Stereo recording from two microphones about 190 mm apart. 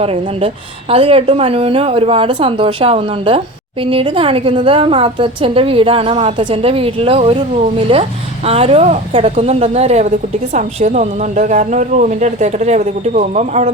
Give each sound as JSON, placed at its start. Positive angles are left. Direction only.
{"t": 0.0, "sound": "a woman's voice", "side_deg": -30}